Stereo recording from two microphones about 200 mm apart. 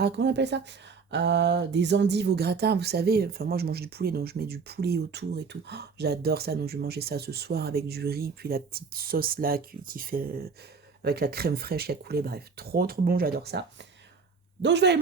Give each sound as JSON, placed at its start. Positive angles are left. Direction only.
{"t": 0.0, "sound": "speech", "side_deg": -60}